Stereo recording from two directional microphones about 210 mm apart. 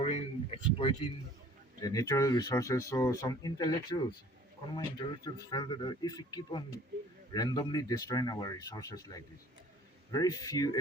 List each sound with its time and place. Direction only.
0.0 s speech: 30° left (ahead or behind)
1.8 s speech: 15° left (ahead or behind)